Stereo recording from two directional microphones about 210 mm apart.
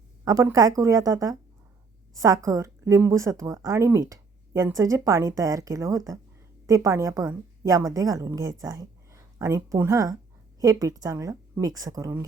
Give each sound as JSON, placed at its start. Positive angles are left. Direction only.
{"t": 0.3, "sound": "a woman's voice", "side_deg": -15}